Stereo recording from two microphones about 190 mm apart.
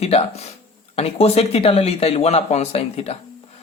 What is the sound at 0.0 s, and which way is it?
A woman's voice, 30° left (ahead or behind).